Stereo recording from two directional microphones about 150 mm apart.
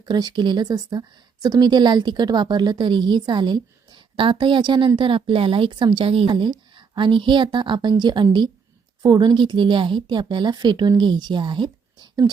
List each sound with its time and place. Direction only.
0.0 s a woman's voice: 25° right (ahead or behind)